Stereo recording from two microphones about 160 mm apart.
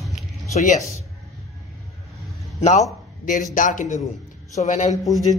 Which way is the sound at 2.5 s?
45° left (ahead or behind).